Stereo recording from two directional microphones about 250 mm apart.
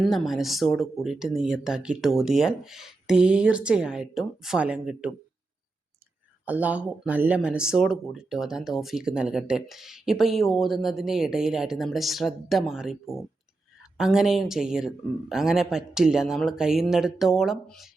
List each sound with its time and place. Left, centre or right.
0.0 s speech: centre
6.4 s speech: centre